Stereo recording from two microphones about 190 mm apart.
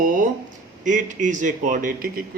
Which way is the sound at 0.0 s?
45° right (ahead or behind).